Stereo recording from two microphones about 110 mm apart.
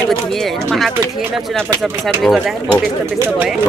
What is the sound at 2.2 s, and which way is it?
Speech, centre (ahead or behind).